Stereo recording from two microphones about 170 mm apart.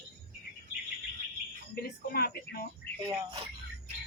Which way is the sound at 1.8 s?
65° left (ahead or behind).